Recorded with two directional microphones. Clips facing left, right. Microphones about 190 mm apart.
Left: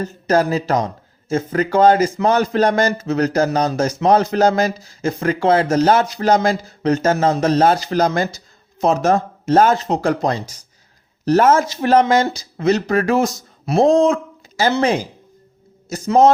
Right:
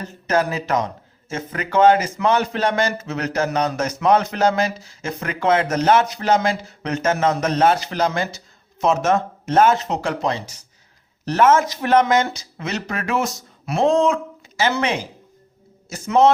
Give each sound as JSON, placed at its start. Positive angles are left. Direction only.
{"t": 0.0, "sound": "speech", "side_deg": 35}